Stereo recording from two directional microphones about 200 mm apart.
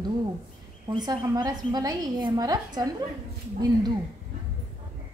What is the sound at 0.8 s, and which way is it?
A woman's voice, 20° right (ahead or behind).